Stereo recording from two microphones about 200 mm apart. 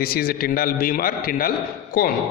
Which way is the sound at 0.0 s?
50° left (ahead or behind).